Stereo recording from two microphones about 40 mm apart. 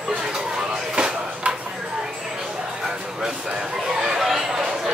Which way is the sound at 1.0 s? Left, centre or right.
Right.